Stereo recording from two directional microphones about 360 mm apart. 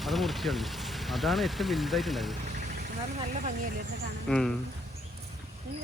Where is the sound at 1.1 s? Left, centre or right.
Centre.